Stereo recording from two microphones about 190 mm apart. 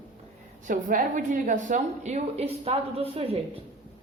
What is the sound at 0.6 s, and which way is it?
A woman's voice, 45° right (ahead or behind).